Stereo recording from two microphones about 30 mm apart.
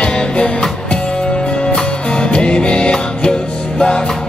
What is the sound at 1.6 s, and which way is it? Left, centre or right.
Music, left.